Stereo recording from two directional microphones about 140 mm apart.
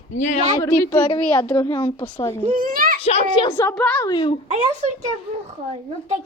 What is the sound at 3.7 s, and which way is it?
Speech, 10° left (ahead or behind).